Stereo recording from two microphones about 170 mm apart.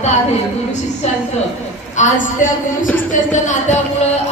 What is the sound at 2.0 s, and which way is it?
Speech, 45° left (ahead or behind).